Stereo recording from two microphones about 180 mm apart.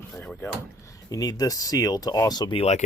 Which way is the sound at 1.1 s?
20° left (ahead or behind).